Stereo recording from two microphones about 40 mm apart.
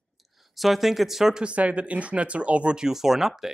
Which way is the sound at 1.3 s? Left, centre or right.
Right.